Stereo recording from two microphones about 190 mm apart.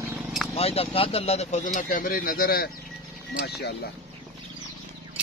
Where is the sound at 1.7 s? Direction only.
45° left (ahead or behind).